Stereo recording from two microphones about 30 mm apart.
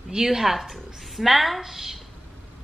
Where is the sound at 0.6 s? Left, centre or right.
Centre.